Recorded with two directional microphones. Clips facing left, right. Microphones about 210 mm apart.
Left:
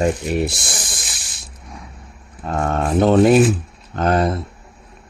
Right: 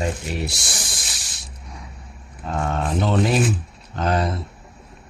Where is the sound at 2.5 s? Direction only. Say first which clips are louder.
Left 4 dB; 50° left (ahead or behind).